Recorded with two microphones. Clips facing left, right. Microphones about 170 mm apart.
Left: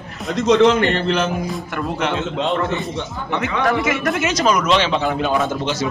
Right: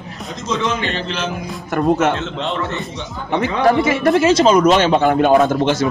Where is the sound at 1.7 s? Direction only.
40° right (ahead or behind).